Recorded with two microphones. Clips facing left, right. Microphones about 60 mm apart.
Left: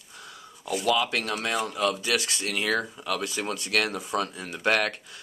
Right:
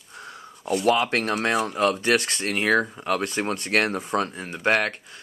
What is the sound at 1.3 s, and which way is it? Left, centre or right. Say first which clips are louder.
Speech: right 5 dB; right.